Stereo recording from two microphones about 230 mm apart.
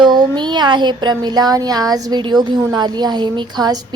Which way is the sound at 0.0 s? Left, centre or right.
Centre.